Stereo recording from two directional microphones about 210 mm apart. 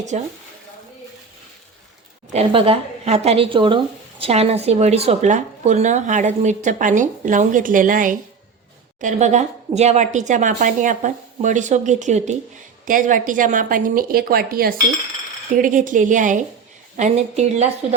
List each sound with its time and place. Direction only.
0.1 s speech: 35° right (ahead or behind)
2.3 s a woman's voice: 30° right (ahead or behind)